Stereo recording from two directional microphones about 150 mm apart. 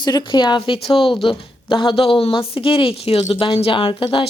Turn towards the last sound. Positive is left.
turn(degrees=35)  # may be behind; listen again after turning